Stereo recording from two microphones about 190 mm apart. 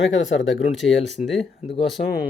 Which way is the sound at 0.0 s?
80° left.